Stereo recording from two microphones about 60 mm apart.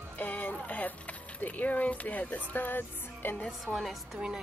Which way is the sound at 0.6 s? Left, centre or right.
Left.